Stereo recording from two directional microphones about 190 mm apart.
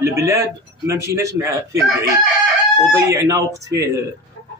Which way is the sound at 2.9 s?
15° right (ahead or behind).